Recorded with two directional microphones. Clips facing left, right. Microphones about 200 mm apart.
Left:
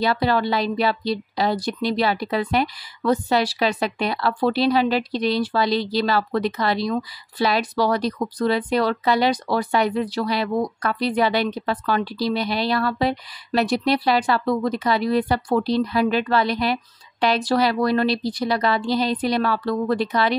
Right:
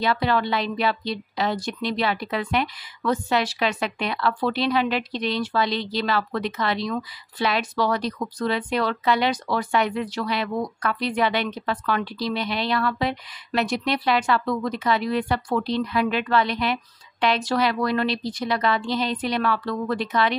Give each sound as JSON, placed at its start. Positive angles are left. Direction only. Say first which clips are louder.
{"t": 0.0, "sound": "a woman's voice", "louder": "left 2 dB", "side_deg": 35}